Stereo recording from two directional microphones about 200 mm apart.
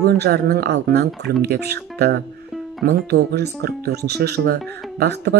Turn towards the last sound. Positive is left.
turn(degrees=-55)  # may be behind; listen again after turning